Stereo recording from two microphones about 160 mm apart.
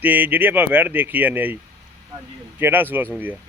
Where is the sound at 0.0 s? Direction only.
10° right (ahead or behind).